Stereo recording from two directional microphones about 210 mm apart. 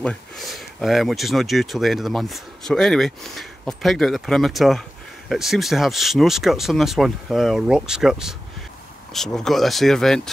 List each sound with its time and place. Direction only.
0.0 s speech: 5° left (ahead or behind)